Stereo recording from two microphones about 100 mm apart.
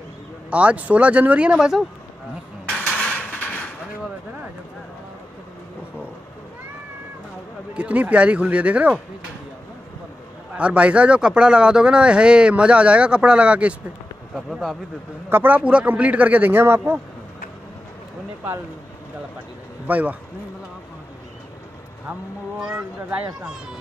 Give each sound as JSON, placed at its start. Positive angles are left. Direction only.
{"t": 0.5, "sound": "speech", "side_deg": -15}
{"t": 2.7, "sound": "a sound", "side_deg": 10}
{"t": 7.7, "sound": "speech", "side_deg": -15}
{"t": 10.5, "sound": "speech", "side_deg": -10}
{"t": 14.3, "sound": "speech", "side_deg": 0}
{"t": 15.2, "sound": "speech", "side_deg": -20}
{"t": 19.9, "sound": "speech", "side_deg": -15}
{"t": 22.6, "sound": "speech", "side_deg": -10}